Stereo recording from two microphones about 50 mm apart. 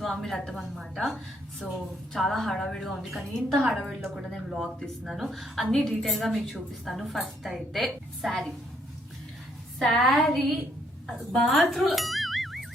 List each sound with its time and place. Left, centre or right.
0.0 s a woman's voice: centre
1.6 s a woman's voice: left
2.1 s a woman's voice: centre
3.0 s a woman's voice: centre
9.7 s a woman's voice: centre